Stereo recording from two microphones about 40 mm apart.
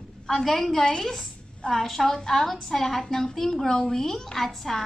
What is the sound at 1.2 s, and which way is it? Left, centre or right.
A woman's voice, centre.